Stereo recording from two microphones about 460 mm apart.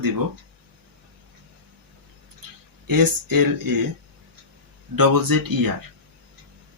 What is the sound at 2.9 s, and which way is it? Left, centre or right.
Speech, right.